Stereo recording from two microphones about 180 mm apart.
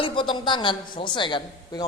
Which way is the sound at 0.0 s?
25° left (ahead or behind).